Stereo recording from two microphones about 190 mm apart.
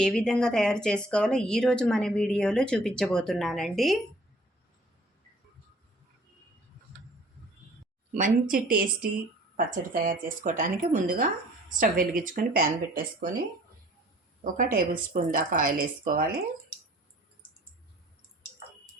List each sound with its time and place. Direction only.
0.0 s speech: 5° left (ahead or behind)
8.1 s a woman's voice: 45° right (ahead or behind)
14.5 s a woman's voice: 45° right (ahead or behind)